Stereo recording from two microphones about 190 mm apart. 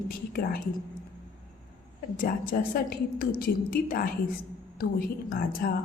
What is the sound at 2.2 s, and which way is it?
A woman's voice, 50° left (ahead or behind).